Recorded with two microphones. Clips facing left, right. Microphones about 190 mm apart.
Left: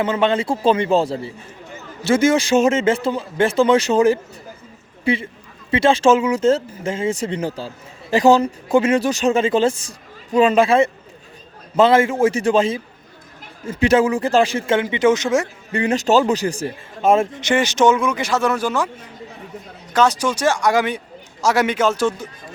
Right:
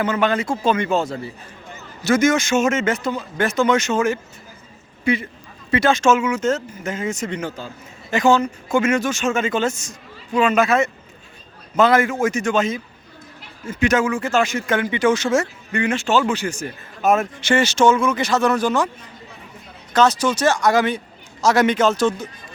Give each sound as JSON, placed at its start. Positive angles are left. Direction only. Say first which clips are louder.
{"t": 0.0, "sound": "a man's voice", "louder": "left 2 dB", "side_deg": 25}
{"t": 15.7, "sound": "a man's voice", "louder": "left 3 dB", "side_deg": 35}
{"t": 19.9, "sound": "speech", "louder": "even", "side_deg": 10}